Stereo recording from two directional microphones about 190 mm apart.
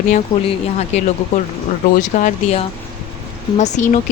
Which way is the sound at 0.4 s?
35° left (ahead or behind).